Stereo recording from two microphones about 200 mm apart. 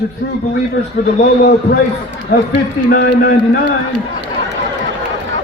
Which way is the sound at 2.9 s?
55° left (ahead or behind).